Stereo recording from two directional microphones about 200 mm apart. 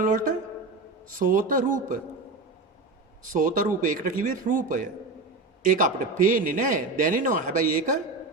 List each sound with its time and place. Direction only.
0.0 s a man's voice: 40° right (ahead or behind)
3.3 s a man's voice: 40° right (ahead or behind)